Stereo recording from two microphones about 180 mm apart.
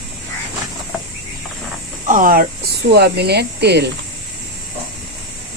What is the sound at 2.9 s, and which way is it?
Speech, 65° right (ahead or behind).